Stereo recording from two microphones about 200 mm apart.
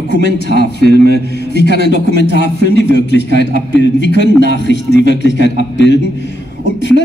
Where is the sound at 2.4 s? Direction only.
60° left (ahead or behind).